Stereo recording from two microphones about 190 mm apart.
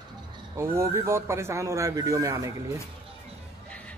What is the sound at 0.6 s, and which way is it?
Speech, 15° right (ahead or behind).